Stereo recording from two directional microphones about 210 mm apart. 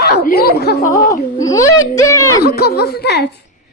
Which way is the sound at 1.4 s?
15° left (ahead or behind).